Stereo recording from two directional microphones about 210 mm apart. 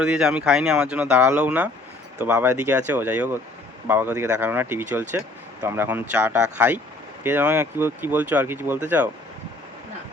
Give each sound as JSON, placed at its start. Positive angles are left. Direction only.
{"t": 0.0, "sound": "speech", "side_deg": -5}